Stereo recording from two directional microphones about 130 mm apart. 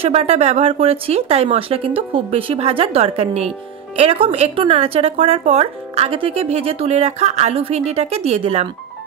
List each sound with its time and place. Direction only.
0.0 s speech: 55° right (ahead or behind)